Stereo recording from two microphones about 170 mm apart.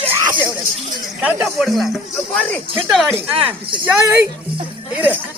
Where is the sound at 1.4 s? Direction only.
Centre (ahead or behind).